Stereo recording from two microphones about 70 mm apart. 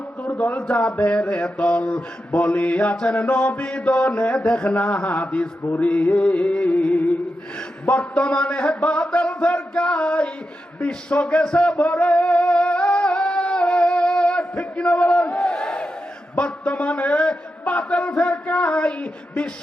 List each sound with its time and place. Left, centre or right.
0.2 s mantra: left
7.9 s a man's voice: centre
10.8 s music: centre
15.3 s crowd: centre
16.3 s a man's voice: left